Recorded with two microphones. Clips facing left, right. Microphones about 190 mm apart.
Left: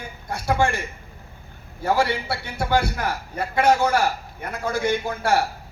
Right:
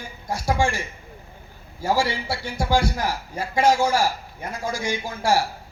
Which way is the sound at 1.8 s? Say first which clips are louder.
Left 1 dB; 60° left (ahead or behind).